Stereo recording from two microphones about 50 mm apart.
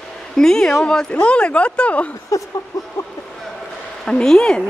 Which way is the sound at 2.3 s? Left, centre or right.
Left.